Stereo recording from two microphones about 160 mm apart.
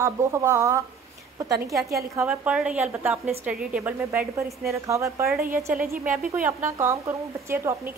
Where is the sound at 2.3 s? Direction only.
5° right (ahead or behind).